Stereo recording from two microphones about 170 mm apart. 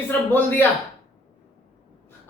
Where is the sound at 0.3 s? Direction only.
10° left (ahead or behind).